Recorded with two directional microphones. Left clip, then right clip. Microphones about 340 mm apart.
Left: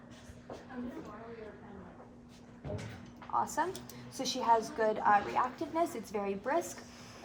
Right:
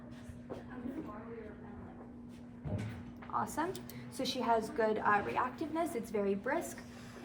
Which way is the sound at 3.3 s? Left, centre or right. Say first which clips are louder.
Left 3 dB; centre.